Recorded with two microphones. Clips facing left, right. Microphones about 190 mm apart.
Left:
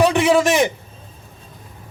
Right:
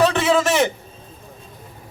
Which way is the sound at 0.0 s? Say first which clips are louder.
Left 2 dB; 15° left (ahead or behind).